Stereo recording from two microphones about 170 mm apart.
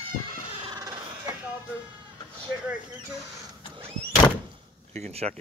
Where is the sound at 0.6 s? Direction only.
25° right (ahead or behind).